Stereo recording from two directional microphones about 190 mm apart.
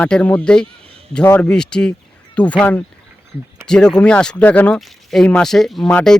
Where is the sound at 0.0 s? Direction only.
5° left (ahead or behind).